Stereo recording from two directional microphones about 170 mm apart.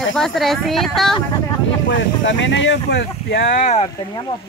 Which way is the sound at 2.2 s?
90° left.